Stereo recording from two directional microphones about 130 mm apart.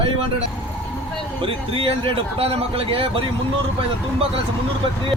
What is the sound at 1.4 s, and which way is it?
Speech, 45° right (ahead or behind).